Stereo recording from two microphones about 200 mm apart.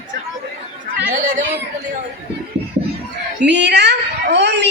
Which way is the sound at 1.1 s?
40° right (ahead or behind).